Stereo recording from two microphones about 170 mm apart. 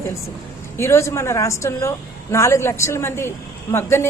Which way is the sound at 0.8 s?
15° left (ahead or behind).